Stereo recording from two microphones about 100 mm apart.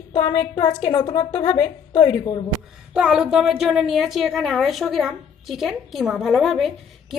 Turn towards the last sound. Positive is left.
turn(degrees=0)  # may be behind; listen again after turning